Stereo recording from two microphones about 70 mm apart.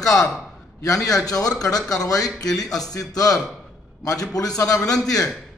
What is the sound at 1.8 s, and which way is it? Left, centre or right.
Speech, centre.